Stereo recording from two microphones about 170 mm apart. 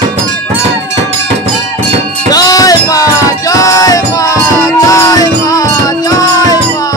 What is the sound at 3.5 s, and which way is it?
Music, 20° left (ahead or behind).